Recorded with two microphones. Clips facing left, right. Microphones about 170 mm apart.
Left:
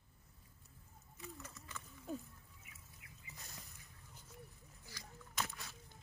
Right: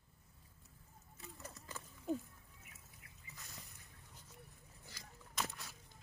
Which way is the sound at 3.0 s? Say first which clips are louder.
Left 2 dB; 40° right (ahead or behind).